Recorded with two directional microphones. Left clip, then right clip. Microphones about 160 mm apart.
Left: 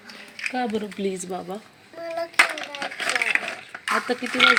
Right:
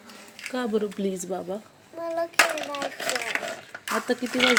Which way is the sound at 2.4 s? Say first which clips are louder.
Left 3 dB; 25° right (ahead or behind).